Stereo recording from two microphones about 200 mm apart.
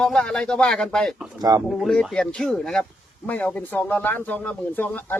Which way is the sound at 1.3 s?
20° right (ahead or behind).